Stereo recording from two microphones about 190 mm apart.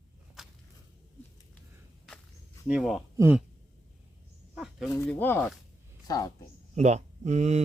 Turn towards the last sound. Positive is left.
turn(degrees=-35)  # may be behind; listen again after turning